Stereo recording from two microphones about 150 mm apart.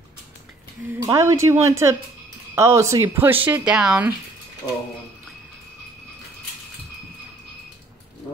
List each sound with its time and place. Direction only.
0.9 s speech: 20° right (ahead or behind)